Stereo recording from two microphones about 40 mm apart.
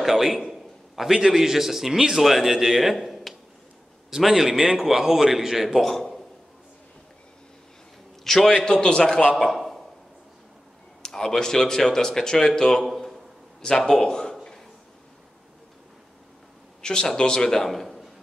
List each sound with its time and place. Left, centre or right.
0.0 s a sound: centre
1.1 s a man's voice: centre
8.2 s a man's voice: centre
8.6 s a man's voice: left
9.4 s a sound: centre
11.0 s a man's voice: centre
16.8 s speech: left; by 18.0 s centre